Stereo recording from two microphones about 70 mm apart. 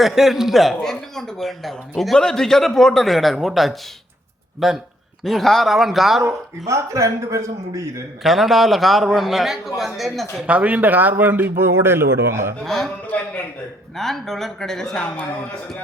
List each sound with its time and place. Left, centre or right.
0.0 s speech: centre
6.2 s a man's voice: right
8.2 s speech: centre
10.4 s a man's voice: centre; by 12.5 s right
12.6 s speech: centre
13.1 s a man's voice: left
13.9 s speech: centre